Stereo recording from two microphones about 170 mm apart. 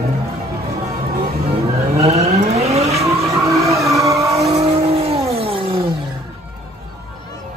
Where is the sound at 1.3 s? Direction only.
35° right (ahead or behind).